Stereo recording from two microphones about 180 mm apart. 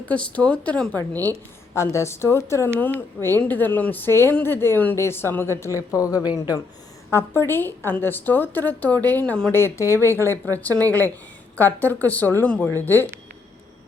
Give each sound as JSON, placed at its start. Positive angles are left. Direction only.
{"t": 0.1, "sound": "speech", "side_deg": 5}